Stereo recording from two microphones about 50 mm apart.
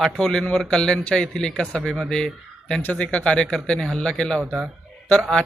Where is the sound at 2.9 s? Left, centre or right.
Left.